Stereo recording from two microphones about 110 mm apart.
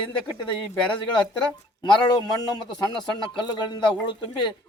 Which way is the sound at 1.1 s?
45° left (ahead or behind).